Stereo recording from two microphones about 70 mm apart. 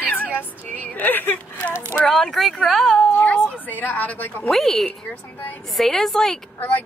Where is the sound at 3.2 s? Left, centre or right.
Left.